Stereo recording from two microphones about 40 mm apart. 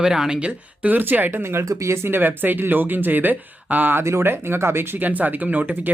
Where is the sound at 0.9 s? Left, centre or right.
Right.